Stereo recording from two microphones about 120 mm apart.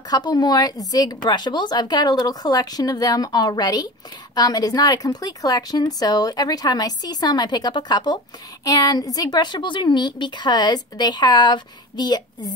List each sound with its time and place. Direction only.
0.1 s a woman's voice: 35° left (ahead or behind)